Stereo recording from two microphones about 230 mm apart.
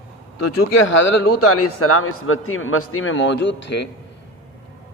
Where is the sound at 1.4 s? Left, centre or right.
Left.